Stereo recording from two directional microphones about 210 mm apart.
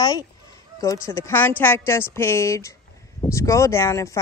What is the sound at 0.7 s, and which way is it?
A woman's voice, 15° left (ahead or behind).